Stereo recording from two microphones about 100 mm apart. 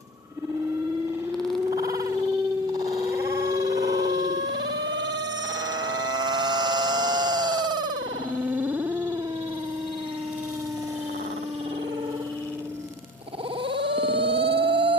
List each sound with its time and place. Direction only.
1.7 s a sound: 35° right (ahead or behind)
5.9 s siren: 45° right (ahead or behind)
8.4 s cacophony: 15° right (ahead or behind)
13.7 s cacophony: 60° right (ahead or behind)